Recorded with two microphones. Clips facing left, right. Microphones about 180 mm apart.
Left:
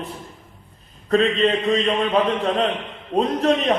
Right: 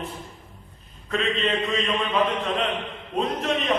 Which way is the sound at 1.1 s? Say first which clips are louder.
Left 7 dB; 35° left (ahead or behind).